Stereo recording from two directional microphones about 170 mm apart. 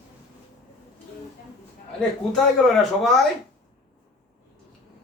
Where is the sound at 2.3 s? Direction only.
Centre (ahead or behind).